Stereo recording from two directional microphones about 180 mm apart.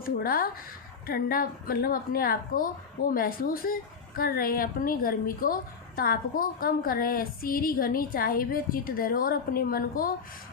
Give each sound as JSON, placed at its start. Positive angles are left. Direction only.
{"t": 0.0, "sound": "a woman's voice", "side_deg": 55}